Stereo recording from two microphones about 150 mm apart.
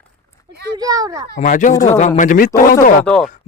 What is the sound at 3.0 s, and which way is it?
Speech, 5° left (ahead or behind).